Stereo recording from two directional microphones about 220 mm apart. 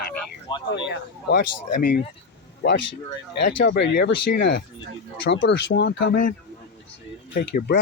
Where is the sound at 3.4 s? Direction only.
50° left (ahead or behind).